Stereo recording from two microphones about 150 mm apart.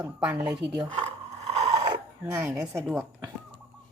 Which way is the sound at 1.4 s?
45° right (ahead or behind).